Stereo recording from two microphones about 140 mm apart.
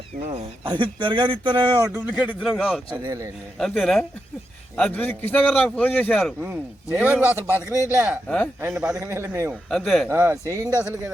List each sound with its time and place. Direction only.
0.3 s speech: 40° right (ahead or behind)
1.8 s a man's voice: 15° right (ahead or behind)
3.0 s a man's voice: 25° right (ahead or behind)
3.6 s a man's voice: 5° left (ahead or behind)
6.4 s a man's voice: 10° right (ahead or behind)
9.0 s a man's voice: 20° right (ahead or behind)
9.6 s a man's voice: centre (ahead or behind)
10.1 s a man's voice: 20° right (ahead or behind)